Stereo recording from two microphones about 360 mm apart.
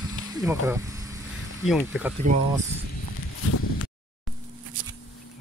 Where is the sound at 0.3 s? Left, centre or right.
Centre.